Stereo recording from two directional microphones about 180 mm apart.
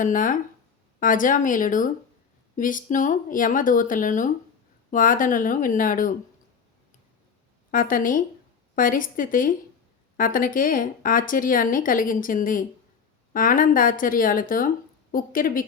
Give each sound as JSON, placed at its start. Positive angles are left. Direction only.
{"t": 0.0, "sound": "speech", "side_deg": 50}
{"t": 7.7, "sound": "speech", "side_deg": 50}